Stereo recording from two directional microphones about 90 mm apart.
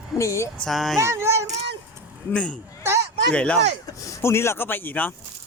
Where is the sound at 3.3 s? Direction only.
15° left (ahead or behind).